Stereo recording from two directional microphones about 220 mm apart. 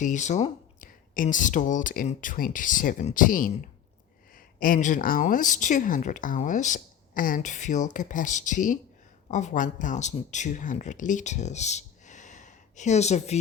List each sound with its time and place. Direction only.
0.0 s speech: 35° left (ahead or behind)
4.6 s speech: 35° left (ahead or behind)